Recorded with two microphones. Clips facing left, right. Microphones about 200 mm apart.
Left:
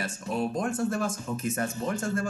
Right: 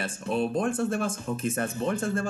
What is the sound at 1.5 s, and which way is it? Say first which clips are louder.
Speech: right 2 dB; 55° right (ahead or behind).